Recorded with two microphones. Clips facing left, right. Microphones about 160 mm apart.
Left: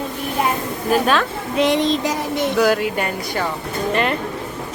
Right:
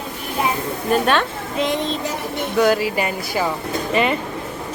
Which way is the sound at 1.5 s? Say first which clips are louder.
Left 5 dB; 75° left (ahead or behind).